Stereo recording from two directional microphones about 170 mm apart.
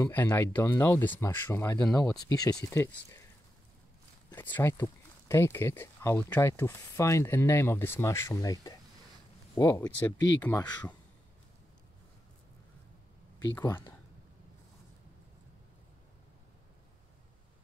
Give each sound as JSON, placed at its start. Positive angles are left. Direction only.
{"t": 0.0, "sound": "speech", "side_deg": 15}
{"t": 4.3, "sound": "speech", "side_deg": 10}
{"t": 13.4, "sound": "speech", "side_deg": 20}